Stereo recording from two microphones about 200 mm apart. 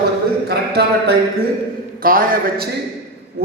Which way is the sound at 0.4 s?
55° right (ahead or behind).